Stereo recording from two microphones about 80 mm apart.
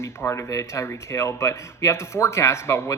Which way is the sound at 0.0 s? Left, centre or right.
Left.